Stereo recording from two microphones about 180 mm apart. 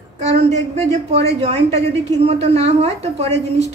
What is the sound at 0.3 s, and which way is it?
A woman's voice, 35° right (ahead or behind).